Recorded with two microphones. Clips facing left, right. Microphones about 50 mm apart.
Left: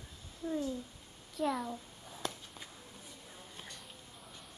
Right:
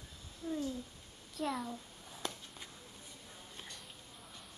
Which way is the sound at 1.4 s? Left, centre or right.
Centre.